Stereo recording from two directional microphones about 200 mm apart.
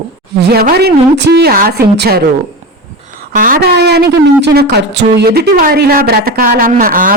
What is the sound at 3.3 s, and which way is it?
A man's voice, 45° right (ahead or behind).